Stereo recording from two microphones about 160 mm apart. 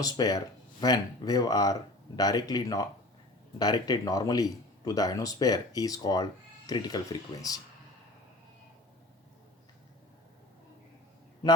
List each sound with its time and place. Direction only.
0.0 s speech: 25° left (ahead or behind)